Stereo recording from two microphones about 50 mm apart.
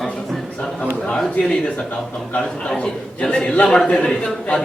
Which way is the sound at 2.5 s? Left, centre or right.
Centre.